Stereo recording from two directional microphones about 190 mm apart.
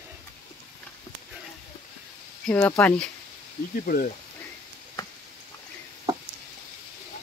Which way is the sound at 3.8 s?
50° left (ahead or behind).